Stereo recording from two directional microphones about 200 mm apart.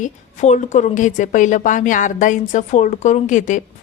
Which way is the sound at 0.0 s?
35° left (ahead or behind).